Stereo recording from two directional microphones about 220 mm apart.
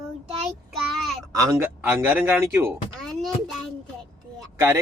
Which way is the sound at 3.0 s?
Centre (ahead or behind).